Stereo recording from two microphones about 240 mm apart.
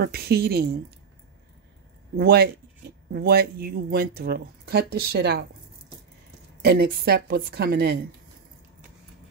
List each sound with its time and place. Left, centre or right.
0.0 s speech: right
2.1 s speech: right
6.6 s speech: right